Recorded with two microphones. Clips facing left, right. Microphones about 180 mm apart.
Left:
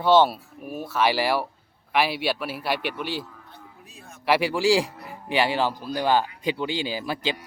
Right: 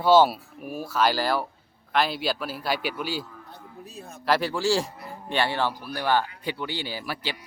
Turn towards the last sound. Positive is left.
turn(degrees=20)  # may be behind; listen again after turning